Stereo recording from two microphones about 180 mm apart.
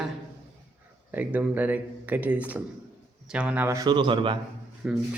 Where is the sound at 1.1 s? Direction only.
10° right (ahead or behind); by 4.4 s 25° right (ahead or behind).